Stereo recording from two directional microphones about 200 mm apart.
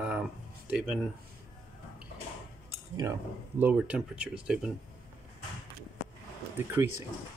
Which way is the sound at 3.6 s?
5° right (ahead or behind).